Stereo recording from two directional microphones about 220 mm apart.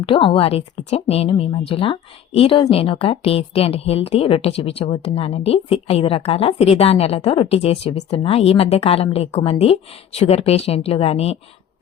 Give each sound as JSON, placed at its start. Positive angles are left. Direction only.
{"t": 0.0, "sound": "a woman's voice", "side_deg": 25}